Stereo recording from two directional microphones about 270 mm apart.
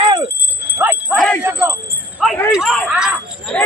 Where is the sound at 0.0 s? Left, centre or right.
Centre.